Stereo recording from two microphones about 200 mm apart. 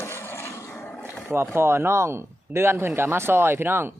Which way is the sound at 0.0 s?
10° left (ahead or behind).